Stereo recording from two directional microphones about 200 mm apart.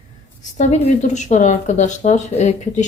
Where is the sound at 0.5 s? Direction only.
35° left (ahead or behind).